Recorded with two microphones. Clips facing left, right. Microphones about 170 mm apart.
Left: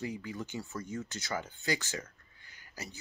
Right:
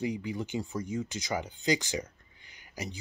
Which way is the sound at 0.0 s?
15° right (ahead or behind).